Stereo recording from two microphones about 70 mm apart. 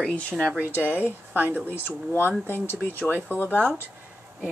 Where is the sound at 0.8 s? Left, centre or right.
Left.